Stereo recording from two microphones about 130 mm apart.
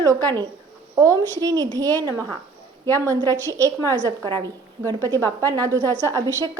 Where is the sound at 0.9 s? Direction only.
25° right (ahead or behind).